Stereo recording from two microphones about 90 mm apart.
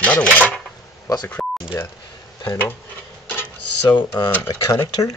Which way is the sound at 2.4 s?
25° left (ahead or behind).